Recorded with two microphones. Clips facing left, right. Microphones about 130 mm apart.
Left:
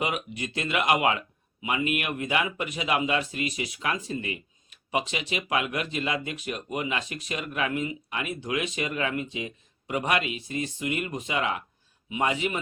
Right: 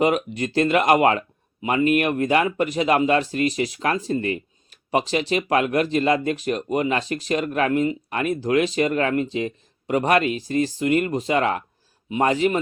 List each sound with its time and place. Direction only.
0.0 s speech: 40° right (ahead or behind)
10.8 s speech: 45° right (ahead or behind)